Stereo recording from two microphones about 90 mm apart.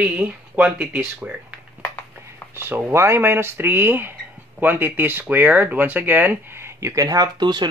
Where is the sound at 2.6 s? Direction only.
25° right (ahead or behind).